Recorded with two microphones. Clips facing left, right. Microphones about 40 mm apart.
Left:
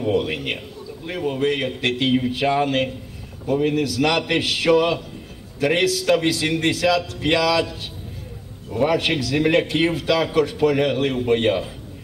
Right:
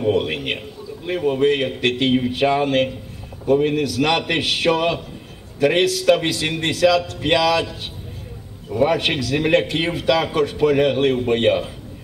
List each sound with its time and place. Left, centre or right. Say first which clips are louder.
0.1 s a man's voice: right 1 dB; right
3.5 s a man's voice: right 2 dB; right
3.8 s a man's voice: right 1 dB; right
8.8 s a man's voice: right 1 dB; right